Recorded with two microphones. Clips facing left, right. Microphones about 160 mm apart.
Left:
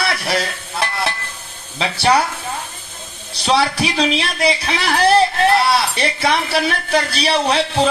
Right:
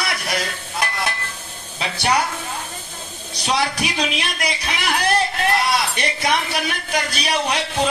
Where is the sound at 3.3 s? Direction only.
30° left (ahead or behind).